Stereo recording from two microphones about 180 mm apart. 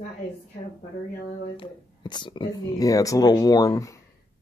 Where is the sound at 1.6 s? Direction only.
25° left (ahead or behind).